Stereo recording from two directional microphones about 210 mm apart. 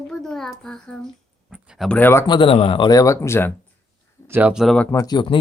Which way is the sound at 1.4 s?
5° right (ahead or behind).